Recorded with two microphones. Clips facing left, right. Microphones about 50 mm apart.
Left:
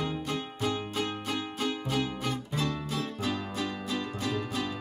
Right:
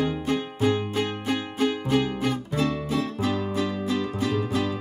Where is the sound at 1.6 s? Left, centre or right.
Centre.